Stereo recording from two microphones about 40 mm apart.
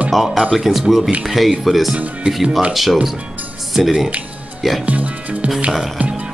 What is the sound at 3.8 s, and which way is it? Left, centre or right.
Speech, centre.